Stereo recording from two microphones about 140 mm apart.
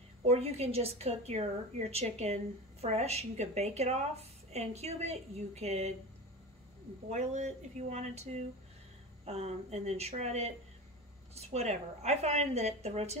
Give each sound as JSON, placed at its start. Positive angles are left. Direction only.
{"t": 0.2, "sound": "a woman's voice", "side_deg": -45}
{"t": 7.1, "sound": "a woman's voice", "side_deg": -55}